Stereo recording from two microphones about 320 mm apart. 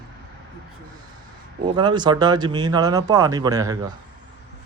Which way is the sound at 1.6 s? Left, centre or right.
Centre.